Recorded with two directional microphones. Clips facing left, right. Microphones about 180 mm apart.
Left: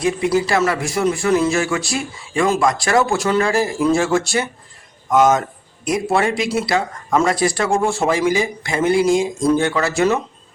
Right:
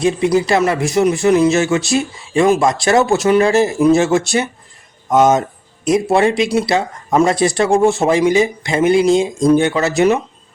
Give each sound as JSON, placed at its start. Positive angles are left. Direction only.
{"t": 0.0, "sound": "speech", "side_deg": -25}